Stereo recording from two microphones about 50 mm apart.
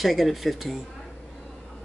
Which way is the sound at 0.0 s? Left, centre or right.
Centre.